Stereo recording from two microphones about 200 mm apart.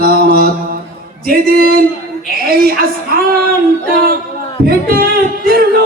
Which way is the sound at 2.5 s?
50° right (ahead or behind).